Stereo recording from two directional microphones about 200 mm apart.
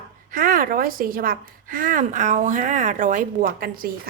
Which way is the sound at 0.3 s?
45° right (ahead or behind).